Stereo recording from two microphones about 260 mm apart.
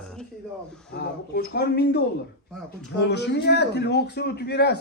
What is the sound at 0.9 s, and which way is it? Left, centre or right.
A man's voice, left.